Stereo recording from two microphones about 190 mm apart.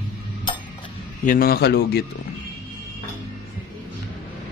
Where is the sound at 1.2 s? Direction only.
50° left (ahead or behind).